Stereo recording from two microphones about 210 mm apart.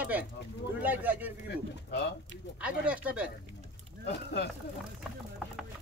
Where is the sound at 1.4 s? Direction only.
55° left (ahead or behind).